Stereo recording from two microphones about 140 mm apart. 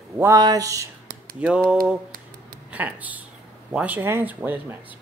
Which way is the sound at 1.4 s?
5° right (ahead or behind).